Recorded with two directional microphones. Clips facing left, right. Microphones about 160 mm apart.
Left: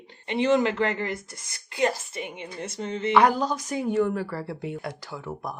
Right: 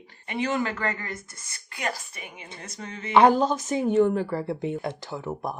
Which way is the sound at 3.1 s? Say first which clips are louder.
Right 3 dB; 25° right (ahead or behind).